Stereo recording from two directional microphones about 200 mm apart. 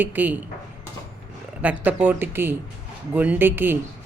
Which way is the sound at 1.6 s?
10° right (ahead or behind).